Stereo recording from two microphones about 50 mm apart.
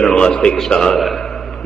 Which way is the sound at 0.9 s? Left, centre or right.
Centre.